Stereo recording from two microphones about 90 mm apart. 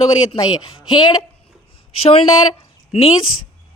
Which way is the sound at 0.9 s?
60° left (ahead or behind).